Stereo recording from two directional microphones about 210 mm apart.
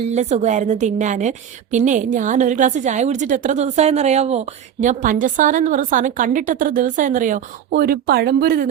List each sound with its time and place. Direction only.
0.1 s a woman's voice: 35° right (ahead or behind)